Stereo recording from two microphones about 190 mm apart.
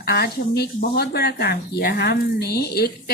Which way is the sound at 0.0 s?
55° left (ahead or behind).